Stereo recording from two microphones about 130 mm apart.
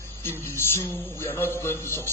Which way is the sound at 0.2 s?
20° left (ahead or behind).